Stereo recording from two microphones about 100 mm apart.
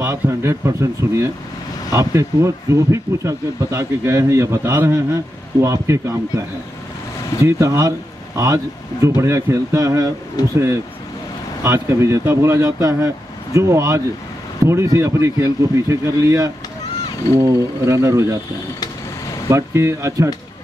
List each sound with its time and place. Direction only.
0.0 s speech: 25° right (ahead or behind)
7.4 s speech: 30° right (ahead or behind)
9.0 s speech: 30° right (ahead or behind)
10.4 s speech: 40° left (ahead or behind)
11.6 s speech: 25° right (ahead or behind)
19.5 s speech: 30° right (ahead or behind)